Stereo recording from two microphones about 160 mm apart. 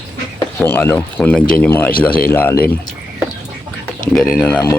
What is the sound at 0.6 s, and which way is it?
Speech, 15° left (ahead or behind).